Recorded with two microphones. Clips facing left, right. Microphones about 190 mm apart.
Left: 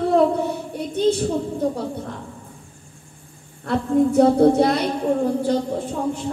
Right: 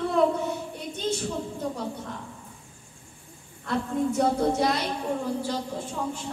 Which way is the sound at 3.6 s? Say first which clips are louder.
Left 8 dB; 60° left (ahead or behind).